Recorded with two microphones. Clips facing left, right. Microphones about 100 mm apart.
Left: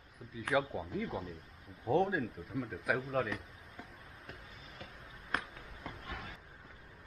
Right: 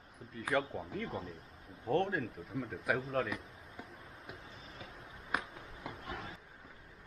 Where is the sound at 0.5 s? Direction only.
5° left (ahead or behind).